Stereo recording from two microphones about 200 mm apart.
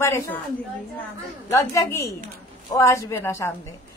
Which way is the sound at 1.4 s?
15° left (ahead or behind).